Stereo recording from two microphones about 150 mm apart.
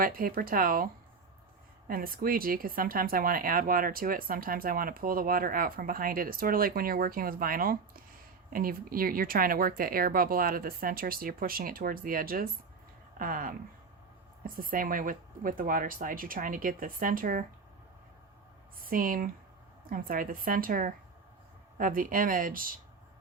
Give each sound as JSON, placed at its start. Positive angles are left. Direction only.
{"t": 0.0, "sound": "speech", "side_deg": -70}
{"t": 1.9, "sound": "speech", "side_deg": -75}
{"t": 18.8, "sound": "speech", "side_deg": -70}